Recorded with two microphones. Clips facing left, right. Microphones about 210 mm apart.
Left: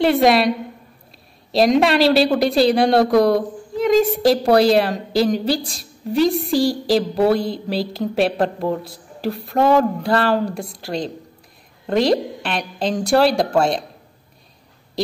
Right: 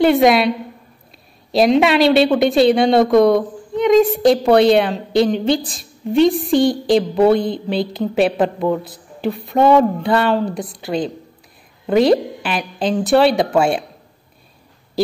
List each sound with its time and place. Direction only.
0.0 s a woman's voice: centre (ahead or behind)
1.8 s a woman's voice: centre (ahead or behind)
8.6 s a man's voice: 30° left (ahead or behind)
9.2 s a woman's voice: centre (ahead or behind)